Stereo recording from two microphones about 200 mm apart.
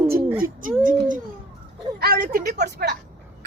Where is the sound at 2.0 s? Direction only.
50° right (ahead or behind).